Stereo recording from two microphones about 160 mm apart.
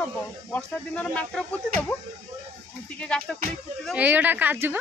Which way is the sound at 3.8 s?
10° right (ahead or behind).